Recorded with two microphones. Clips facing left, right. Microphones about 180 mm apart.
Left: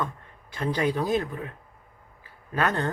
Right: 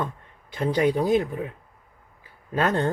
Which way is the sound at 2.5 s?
25° right (ahead or behind).